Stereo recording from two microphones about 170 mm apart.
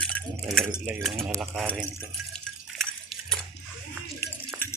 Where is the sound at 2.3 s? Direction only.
Centre (ahead or behind).